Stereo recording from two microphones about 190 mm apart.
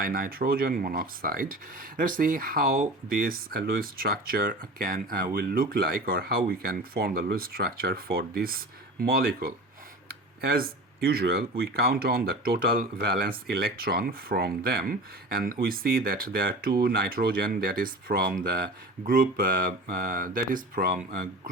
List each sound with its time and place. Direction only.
0.0 s speech: 50° right (ahead or behind)